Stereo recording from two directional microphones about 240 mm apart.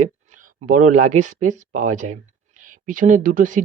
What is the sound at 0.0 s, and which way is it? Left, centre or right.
Speech, right.